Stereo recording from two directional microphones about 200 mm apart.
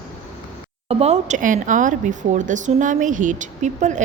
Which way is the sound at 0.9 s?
30° right (ahead or behind).